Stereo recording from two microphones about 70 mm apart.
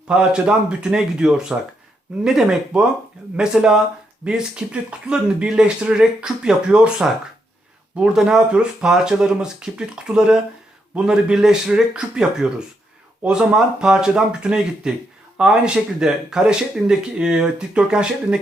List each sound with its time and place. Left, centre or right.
0.1 s speech: centre